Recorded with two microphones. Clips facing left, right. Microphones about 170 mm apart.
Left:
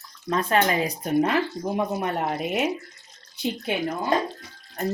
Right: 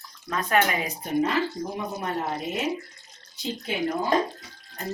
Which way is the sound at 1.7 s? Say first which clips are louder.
Left 8 dB; 60° left (ahead or behind).